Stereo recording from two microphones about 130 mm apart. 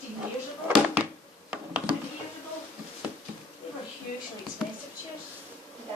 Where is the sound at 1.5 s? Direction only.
10° right (ahead or behind).